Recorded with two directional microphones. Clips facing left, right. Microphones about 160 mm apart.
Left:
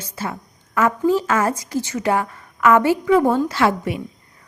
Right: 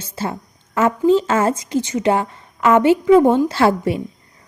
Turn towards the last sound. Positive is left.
turn(degrees=-30)  # may be behind; listen again after turning